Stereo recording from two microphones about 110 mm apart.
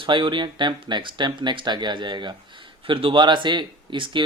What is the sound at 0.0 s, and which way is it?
Speech, 45° right (ahead or behind).